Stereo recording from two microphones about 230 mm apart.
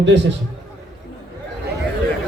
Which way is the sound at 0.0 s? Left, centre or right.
Right.